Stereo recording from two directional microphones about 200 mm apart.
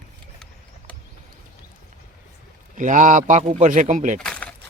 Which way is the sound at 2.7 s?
40° right (ahead or behind).